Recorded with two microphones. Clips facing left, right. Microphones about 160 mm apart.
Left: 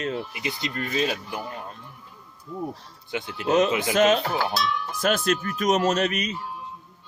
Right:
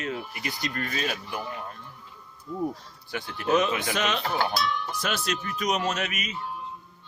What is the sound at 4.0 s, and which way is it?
Speech, 45° left (ahead or behind).